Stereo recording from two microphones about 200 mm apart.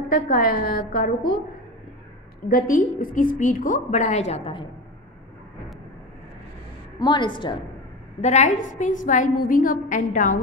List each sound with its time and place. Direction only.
0.3 s a woman's voice: 45° left (ahead or behind)
2.4 s a woman's voice: 45° left (ahead or behind); by 4.6 s 30° left (ahead or behind)
7.0 s a woman's voice: 20° left (ahead or behind)
8.2 s a woman's voice: 35° left (ahead or behind)